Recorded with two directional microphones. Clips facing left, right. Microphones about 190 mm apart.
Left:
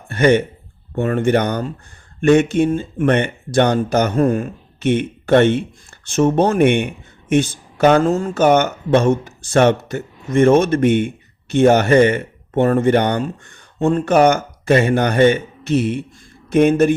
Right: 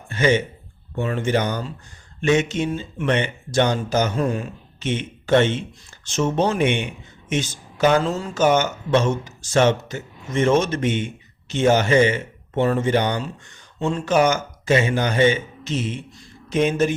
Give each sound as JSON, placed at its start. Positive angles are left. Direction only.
{"t": 0.1, "sound": "speech", "side_deg": 60}